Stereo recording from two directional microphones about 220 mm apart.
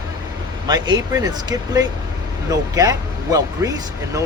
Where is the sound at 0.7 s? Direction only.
15° right (ahead or behind).